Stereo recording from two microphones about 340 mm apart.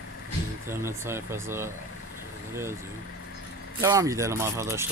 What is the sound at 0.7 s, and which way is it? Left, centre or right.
Speech, centre.